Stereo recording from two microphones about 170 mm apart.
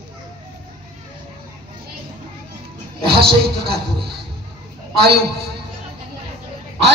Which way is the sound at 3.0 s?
65° right (ahead or behind).